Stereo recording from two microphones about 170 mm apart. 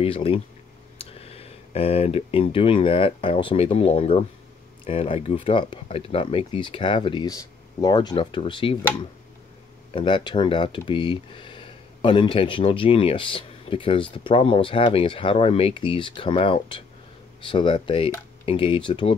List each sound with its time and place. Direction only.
0.0 s speech: 35° left (ahead or behind)
9.9 s speech: 30° left (ahead or behind)